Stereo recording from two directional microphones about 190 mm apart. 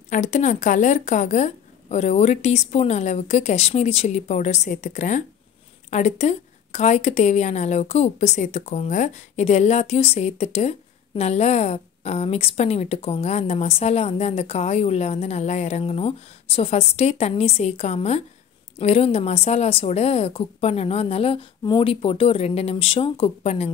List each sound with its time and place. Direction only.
0.1 s a woman's voice: 40° left (ahead or behind)